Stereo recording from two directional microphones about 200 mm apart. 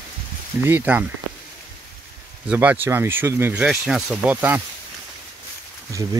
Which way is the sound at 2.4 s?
10° right (ahead or behind).